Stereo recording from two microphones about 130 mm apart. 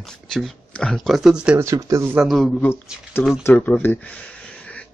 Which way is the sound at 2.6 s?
20° left (ahead or behind).